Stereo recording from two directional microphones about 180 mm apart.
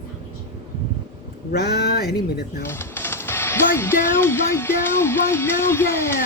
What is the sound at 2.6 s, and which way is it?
Speech, 15° left (ahead or behind).